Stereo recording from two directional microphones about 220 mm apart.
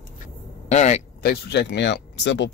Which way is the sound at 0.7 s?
30° left (ahead or behind).